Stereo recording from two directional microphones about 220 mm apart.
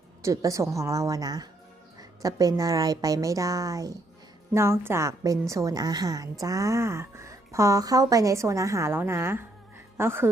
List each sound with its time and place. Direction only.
0.2 s a woman's voice: 15° right (ahead or behind)